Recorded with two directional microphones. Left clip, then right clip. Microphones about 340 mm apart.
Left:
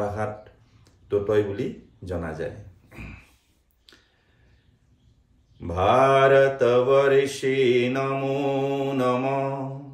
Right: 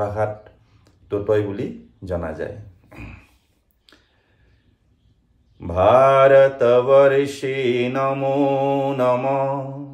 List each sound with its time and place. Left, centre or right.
0.0 s speech: centre
3.9 s a sound: centre
5.7 s mantra: centre